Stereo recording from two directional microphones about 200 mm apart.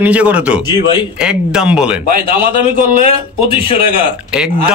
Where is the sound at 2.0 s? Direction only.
45° right (ahead or behind).